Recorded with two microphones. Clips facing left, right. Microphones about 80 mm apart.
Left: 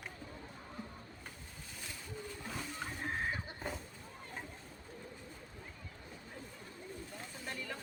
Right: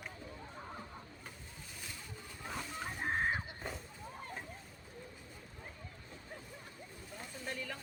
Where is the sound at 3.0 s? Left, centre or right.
Right.